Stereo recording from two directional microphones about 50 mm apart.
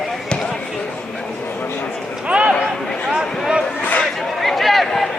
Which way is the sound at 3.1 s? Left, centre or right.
Centre.